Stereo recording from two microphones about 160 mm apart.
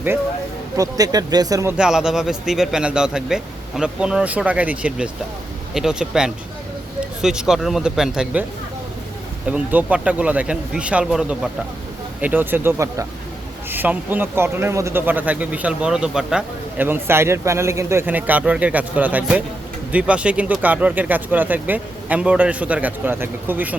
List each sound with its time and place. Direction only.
0.8 s speech: 25° right (ahead or behind)
1.7 s a man's voice: 5° right (ahead or behind)
9.5 s a man's voice: 10° right (ahead or behind)